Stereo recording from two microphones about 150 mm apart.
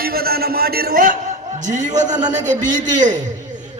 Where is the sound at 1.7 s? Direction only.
50° right (ahead or behind).